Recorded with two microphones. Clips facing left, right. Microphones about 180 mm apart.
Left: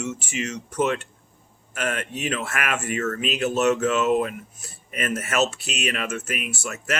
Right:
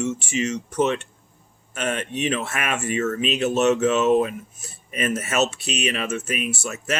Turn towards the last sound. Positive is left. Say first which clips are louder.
# right 2 dB
turn(degrees=-25)  # may be behind; listen again after turning